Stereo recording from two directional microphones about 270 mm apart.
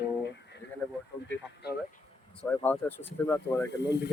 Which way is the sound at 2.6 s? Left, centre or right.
Centre.